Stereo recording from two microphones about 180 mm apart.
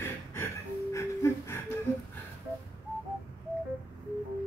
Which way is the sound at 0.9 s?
15° left (ahead or behind).